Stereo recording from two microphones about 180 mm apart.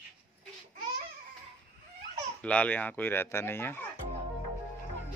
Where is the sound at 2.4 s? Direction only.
5° left (ahead or behind).